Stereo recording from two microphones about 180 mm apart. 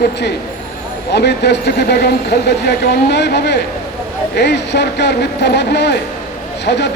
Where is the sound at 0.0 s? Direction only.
70° left (ahead or behind).